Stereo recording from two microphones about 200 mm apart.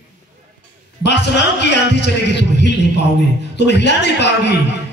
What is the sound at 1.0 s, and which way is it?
A man's voice, 60° left (ahead or behind).